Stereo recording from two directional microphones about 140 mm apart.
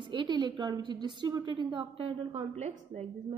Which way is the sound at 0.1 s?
35° right (ahead or behind).